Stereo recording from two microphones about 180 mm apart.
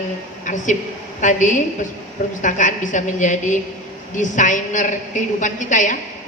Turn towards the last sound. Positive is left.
turn(degrees=45)  # may be behind; listen again after turning